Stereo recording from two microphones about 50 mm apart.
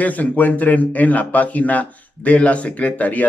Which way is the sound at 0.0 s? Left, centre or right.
Left.